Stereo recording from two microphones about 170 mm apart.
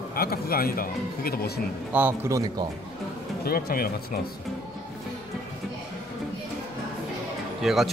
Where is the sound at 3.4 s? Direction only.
60° left (ahead or behind).